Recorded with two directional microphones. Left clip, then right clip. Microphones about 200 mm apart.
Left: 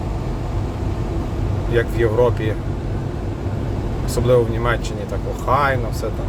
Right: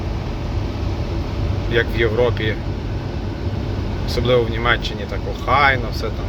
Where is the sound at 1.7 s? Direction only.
20° left (ahead or behind).